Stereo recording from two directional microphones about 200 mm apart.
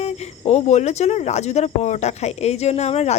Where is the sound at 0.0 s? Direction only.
35° left (ahead or behind).